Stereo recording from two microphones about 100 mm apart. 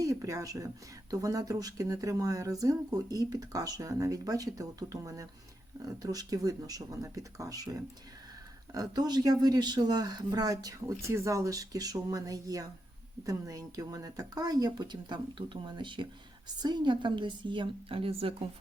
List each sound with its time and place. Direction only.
0.0 s speech: 35° right (ahead or behind); by 18.4 s 70° right (ahead or behind)